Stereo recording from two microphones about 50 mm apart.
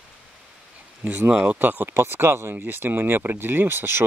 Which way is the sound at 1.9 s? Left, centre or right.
Right.